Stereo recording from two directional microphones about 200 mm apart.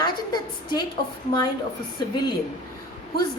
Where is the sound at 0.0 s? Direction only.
20° left (ahead or behind).